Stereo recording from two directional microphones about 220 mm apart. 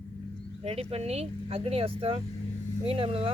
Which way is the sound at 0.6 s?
25° right (ahead or behind).